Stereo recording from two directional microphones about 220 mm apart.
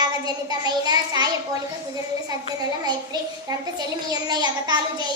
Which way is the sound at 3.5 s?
20° right (ahead or behind).